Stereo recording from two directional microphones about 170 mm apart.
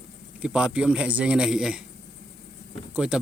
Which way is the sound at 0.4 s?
5° right (ahead or behind).